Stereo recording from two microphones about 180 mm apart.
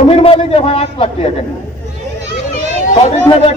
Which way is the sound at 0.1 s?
30° left (ahead or behind).